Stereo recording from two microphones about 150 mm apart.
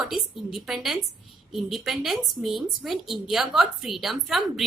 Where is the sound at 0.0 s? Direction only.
Centre (ahead or behind).